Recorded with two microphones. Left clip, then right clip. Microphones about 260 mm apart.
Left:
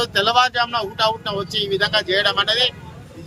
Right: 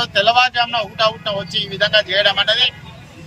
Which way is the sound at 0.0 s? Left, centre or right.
Centre.